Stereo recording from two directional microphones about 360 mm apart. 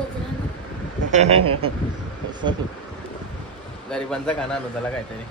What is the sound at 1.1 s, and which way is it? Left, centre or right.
Speech, centre.